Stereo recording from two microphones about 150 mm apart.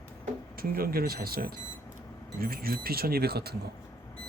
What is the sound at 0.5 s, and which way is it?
Speech, 80° right.